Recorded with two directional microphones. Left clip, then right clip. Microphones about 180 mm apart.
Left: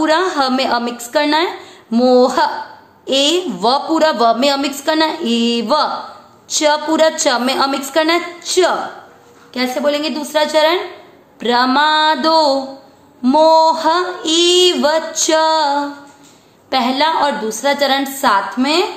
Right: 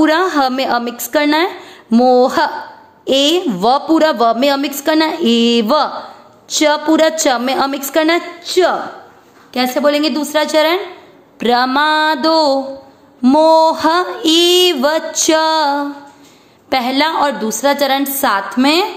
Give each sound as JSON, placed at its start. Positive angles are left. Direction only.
{"t": 0.0, "sound": "a woman's voice", "side_deg": -35}
{"t": 8.4, "sound": "a woman's voice", "side_deg": -15}
{"t": 9.5, "sound": "a woman's voice", "side_deg": -40}